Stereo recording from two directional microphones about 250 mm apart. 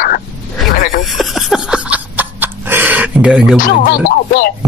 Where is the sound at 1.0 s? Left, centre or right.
Centre.